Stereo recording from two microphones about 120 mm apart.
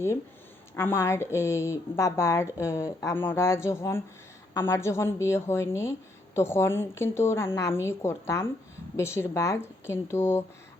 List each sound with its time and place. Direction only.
0.8 s a woman's voice: 20° left (ahead or behind)